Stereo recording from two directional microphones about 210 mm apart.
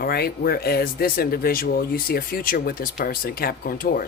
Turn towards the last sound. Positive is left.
turn(degrees=45)  # may be behind; listen again after turning